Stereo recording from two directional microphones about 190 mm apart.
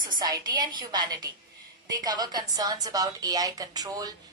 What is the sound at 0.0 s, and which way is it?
A woman's voice, 20° right (ahead or behind).